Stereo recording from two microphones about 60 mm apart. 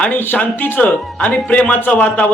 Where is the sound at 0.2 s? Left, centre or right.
Left.